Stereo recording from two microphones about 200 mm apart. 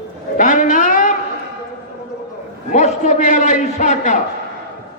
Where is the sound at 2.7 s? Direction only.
35° left (ahead or behind).